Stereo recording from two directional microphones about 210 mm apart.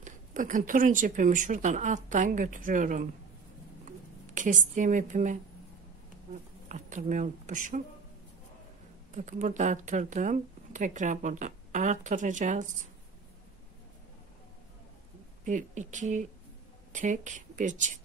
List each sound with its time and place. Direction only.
0.0 s speech: 35° right (ahead or behind)
3.8 s a sound: 35° right (ahead or behind)
6.7 s speech: 35° right (ahead or behind)
9.1 s speech: 35° right (ahead or behind)
15.4 s speech: 35° right (ahead or behind)